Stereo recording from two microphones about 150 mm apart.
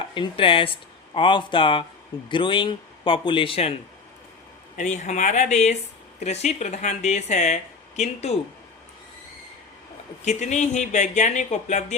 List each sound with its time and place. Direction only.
0.1 s speech: 35° left (ahead or behind)
4.8 s speech: 50° left (ahead or behind)
10.2 s speech: 50° left (ahead or behind)